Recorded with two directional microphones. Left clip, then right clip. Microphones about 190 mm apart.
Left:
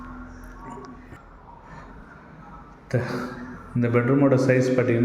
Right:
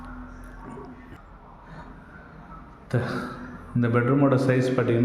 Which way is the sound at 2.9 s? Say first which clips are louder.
Left 1 dB; 10° right (ahead or behind).